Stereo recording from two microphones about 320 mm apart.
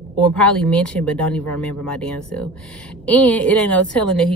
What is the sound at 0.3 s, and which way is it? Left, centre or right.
A woman's voice, centre.